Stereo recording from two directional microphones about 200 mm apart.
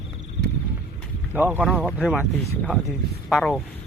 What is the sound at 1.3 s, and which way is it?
Speech, 10° right (ahead or behind).